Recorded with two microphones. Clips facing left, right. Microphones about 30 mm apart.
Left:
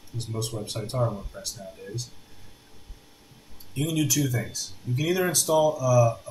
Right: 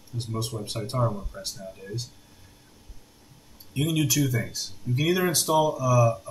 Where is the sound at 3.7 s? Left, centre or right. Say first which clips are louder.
Right 1 dB; centre.